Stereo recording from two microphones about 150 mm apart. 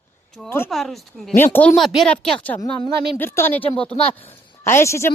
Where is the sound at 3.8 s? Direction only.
40° left (ahead or behind).